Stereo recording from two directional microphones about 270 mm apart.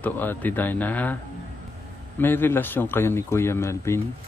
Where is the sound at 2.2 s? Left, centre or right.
Centre.